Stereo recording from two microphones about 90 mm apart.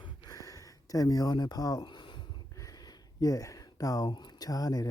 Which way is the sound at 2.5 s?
40° left (ahead or behind).